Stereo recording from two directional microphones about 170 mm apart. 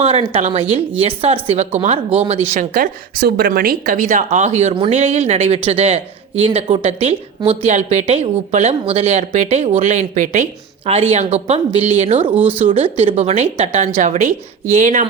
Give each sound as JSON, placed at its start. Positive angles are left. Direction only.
{"t": 0.0, "sound": "speech", "side_deg": -35}
{"t": 2.5, "sound": "speech", "side_deg": -50}